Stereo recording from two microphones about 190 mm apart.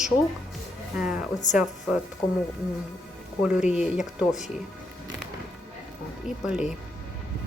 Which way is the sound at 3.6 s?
5° right (ahead or behind).